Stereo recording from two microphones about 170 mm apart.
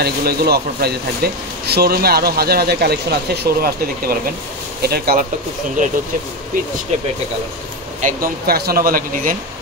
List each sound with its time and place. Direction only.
0.0 s speech: 65° right (ahead or behind)
8.0 s speech: 60° right (ahead or behind)